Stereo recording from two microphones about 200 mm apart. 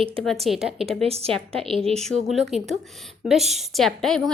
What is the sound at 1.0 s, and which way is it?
Speech, 30° right (ahead or behind).